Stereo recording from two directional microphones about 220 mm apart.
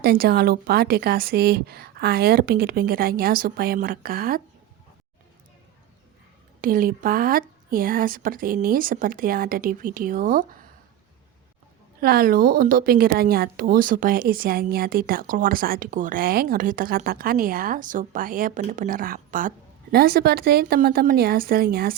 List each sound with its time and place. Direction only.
0.0 s speech: 45° right (ahead or behind)
6.6 s a woman's voice: 40° right (ahead or behind)
11.9 s a woman's voice: 40° right (ahead or behind)